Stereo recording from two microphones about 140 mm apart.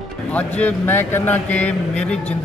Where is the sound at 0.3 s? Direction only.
10° left (ahead or behind).